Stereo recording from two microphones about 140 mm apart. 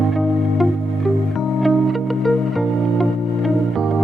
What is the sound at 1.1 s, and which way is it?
Music, centre (ahead or behind).